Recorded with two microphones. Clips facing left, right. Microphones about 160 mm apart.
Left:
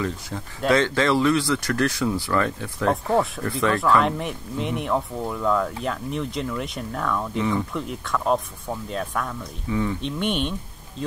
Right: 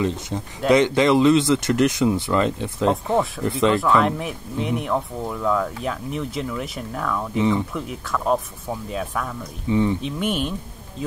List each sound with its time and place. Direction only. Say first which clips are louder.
0.0 s speech: right 4 dB; 20° right (ahead or behind)
3.8 s speech: right 1 dB; centre (ahead or behind)
9.7 s speech: right 5 dB; 20° right (ahead or behind)
10.0 s speech: right 1 dB; 5° right (ahead or behind)